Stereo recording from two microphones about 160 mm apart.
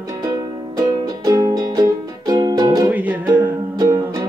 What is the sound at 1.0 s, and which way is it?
Music, 20° right (ahead or behind).